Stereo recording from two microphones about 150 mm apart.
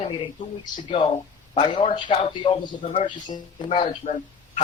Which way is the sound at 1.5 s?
35° left (ahead or behind).